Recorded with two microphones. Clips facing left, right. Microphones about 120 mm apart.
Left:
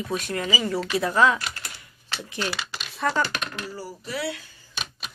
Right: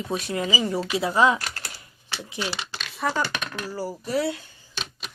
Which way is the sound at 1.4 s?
40° right (ahead or behind).